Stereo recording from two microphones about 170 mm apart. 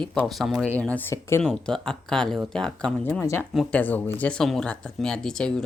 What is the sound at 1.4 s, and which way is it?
Speech, centre (ahead or behind).